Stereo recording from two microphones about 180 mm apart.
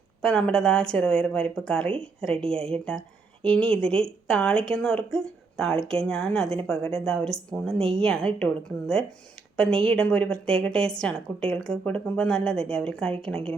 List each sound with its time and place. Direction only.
0.2 s a woman's voice: 5° left (ahead or behind)